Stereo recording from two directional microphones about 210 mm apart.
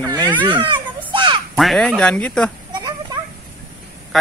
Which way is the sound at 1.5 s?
Centre (ahead or behind).